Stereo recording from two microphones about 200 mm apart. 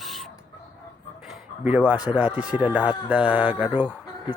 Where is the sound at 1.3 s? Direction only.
5° right (ahead or behind).